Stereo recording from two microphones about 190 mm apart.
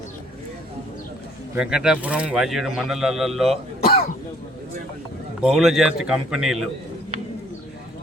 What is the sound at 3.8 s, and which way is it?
Cough, 55° left (ahead or behind).